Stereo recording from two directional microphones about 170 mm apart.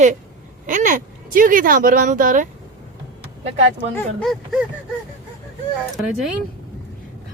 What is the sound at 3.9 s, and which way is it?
Speech, centre (ahead or behind).